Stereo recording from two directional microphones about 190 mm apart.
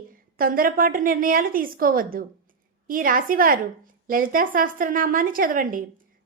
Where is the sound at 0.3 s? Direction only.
50° right (ahead or behind).